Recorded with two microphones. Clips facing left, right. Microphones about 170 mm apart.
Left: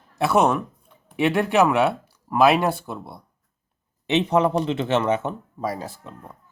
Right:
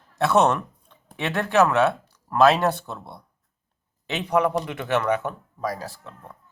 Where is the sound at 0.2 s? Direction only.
5° left (ahead or behind).